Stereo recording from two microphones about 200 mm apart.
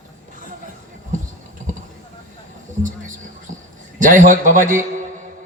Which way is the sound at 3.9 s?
40° right (ahead or behind).